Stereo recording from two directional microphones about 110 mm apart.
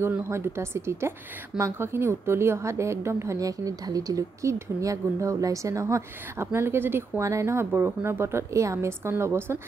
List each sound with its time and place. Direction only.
0.0 s a woman's voice: 20° right (ahead or behind)